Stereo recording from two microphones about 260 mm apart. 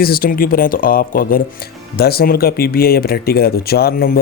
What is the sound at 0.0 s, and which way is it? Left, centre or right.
Speech, left.